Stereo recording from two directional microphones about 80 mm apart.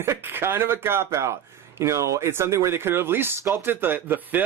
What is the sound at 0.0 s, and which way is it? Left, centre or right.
Speech, right.